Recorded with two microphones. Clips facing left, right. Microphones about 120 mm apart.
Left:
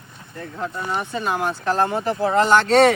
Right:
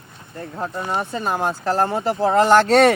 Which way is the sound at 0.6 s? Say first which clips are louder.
Right 1 dB; 35° right (ahead or behind).